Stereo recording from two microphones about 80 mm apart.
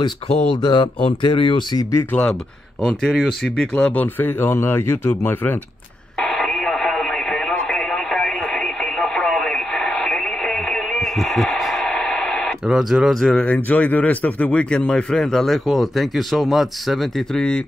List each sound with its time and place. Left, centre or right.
0.3 s a man's voice: centre
0.6 s speech: left
1.8 s speech: left
2.9 s a man's voice: centre
3.7 s speech: centre
6.1 s radio: centre
12.6 s speech: centre
13.4 s a man's voice: centre